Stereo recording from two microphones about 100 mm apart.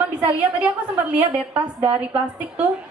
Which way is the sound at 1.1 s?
15° right (ahead or behind).